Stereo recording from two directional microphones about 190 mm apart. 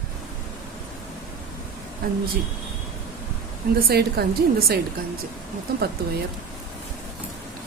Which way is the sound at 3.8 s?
55° right (ahead or behind).